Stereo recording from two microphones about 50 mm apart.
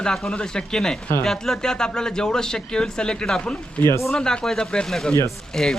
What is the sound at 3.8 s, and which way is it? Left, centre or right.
Speech, left.